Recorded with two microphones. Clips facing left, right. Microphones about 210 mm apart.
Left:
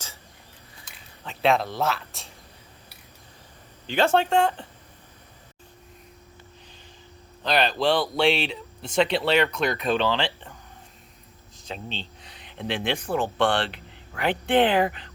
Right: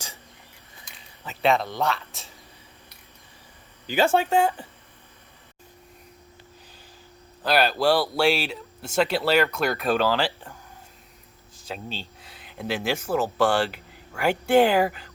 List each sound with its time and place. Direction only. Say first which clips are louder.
1.2 s speech: even; centre (ahead or behind)
3.8 s speech: even; 5° right (ahead or behind)
7.4 s speech: right 2 dB; 5° right (ahead or behind)
11.7 s speech: even; 5° right (ahead or behind)